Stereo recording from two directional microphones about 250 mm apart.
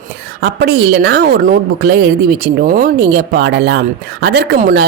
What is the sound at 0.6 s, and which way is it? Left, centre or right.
Speech, right.